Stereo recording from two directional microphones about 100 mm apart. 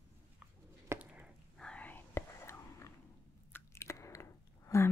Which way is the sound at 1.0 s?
10° right (ahead or behind).